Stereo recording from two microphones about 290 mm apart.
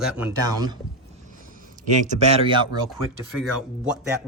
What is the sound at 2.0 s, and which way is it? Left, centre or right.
Speech, right.